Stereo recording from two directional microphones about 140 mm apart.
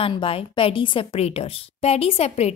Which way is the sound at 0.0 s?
40° left (ahead or behind).